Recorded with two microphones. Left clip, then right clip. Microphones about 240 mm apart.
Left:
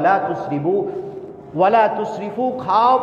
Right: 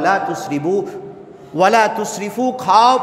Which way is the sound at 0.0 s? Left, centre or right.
Right.